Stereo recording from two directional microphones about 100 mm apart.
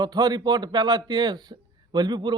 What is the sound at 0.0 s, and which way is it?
A man's voice, 40° right (ahead or behind).